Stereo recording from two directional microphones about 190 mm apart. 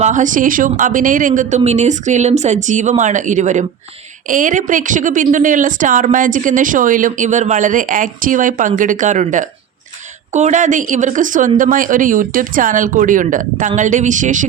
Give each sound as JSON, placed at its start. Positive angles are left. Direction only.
{"t": 0.0, "sound": "a woman's voice", "side_deg": -40}